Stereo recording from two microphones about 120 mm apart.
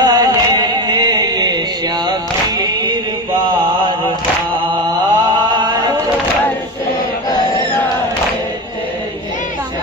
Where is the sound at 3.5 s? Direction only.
40° right (ahead or behind).